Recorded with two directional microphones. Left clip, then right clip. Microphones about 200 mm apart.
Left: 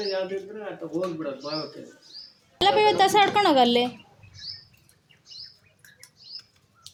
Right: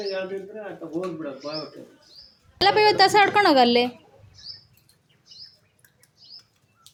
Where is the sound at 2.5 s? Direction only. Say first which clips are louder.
Right 2 dB; 10° right (ahead or behind).